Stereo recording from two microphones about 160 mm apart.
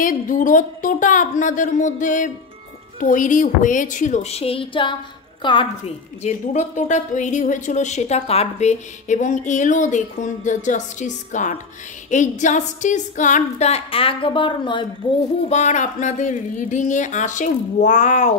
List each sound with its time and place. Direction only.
0.0 s a woman's voice: 55° left (ahead or behind); by 5.9 s 30° left (ahead or behind)
6.2 s a woman's voice: 45° left (ahead or behind); by 14.9 s 30° left (ahead or behind)
15.4 s a woman's voice: 45° left (ahead or behind)